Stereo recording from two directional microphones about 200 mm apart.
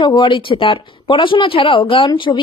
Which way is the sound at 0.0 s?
25° left (ahead or behind).